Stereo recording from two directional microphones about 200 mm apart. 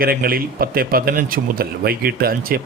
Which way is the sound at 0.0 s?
50° right (ahead or behind).